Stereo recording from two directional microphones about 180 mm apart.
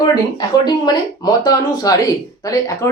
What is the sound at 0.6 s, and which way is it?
Speech, 25° left (ahead or behind).